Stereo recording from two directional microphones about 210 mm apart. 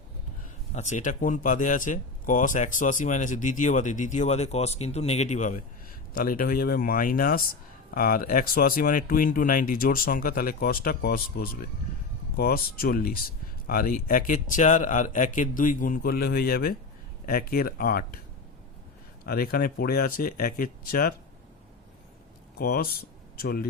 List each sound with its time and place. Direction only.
0.7 s speech: 35° left (ahead or behind)
19.2 s speech: 45° left (ahead or behind)
22.5 s speech: 50° left (ahead or behind)